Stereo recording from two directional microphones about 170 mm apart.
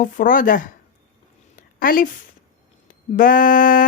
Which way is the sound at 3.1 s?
55° left (ahead or behind).